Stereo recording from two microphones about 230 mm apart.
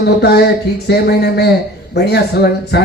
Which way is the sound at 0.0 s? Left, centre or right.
Left.